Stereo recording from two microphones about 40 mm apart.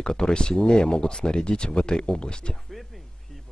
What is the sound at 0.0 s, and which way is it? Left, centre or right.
Speech, left.